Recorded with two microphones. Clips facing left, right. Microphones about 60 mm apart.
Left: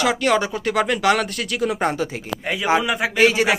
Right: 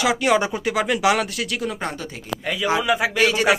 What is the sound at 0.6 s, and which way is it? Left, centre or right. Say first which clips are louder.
Speech: left 1 dB; centre.